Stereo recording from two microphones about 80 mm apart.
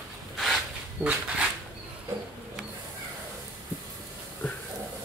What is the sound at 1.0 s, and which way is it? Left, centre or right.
Speech, centre.